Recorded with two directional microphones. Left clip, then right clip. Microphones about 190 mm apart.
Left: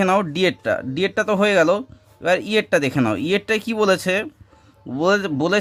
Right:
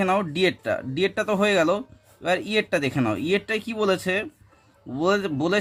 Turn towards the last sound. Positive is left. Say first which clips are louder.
# left 4 dB
turn(degrees=25)  # may be behind; listen again after turning